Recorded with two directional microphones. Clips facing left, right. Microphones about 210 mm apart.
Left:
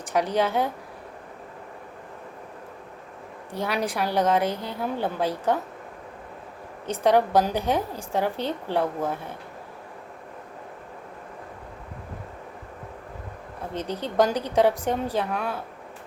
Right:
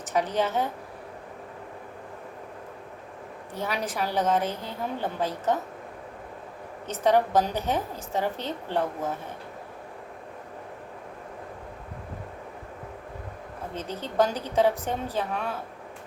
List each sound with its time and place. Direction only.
0.0 s a woman's voice: 10° left (ahead or behind)
3.5 s a woman's voice: 10° left (ahead or behind)
6.8 s a woman's voice: 10° left (ahead or behind)
13.7 s a woman's voice: 15° left (ahead or behind)